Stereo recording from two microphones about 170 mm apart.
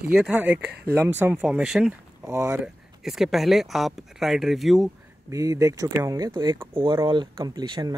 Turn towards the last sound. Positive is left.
turn(degrees=-25)  # may be behind; listen again after turning